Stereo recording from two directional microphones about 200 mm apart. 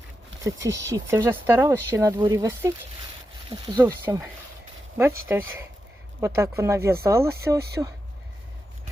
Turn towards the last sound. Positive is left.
turn(degrees=-15)  # may be behind; listen again after turning